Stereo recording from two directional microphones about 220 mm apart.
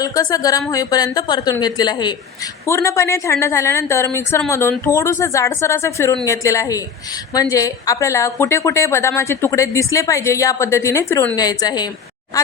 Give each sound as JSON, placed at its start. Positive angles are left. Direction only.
{"t": 0.0, "sound": "a woman's voice", "side_deg": 15}